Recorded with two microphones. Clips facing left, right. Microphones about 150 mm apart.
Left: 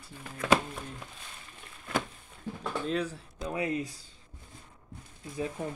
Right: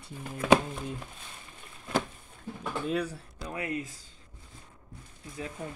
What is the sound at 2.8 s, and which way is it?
Speech, 10° right (ahead or behind).